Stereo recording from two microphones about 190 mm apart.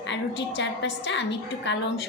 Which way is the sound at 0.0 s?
70° left (ahead or behind).